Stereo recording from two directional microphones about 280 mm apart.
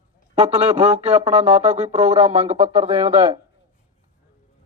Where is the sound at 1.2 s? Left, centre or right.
Right.